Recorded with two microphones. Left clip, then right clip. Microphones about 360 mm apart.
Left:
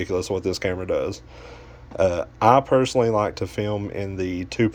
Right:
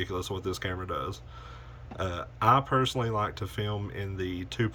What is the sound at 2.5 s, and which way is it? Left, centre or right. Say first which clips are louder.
Speech: left 8 dB; centre.